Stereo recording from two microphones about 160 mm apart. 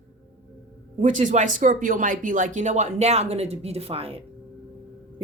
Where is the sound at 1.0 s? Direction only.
50° right (ahead or behind).